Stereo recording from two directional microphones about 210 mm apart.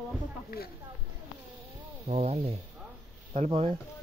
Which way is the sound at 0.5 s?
45° left (ahead or behind).